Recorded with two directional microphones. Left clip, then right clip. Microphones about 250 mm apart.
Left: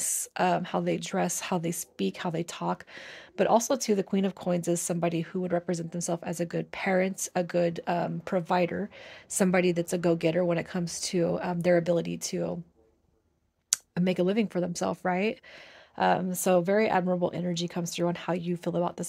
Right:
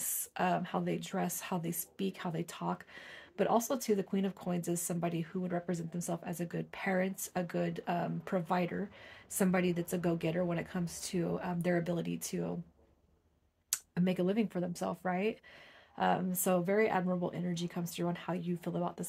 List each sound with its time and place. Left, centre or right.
0.0 s a woman's voice: left
13.7 s a woman's voice: left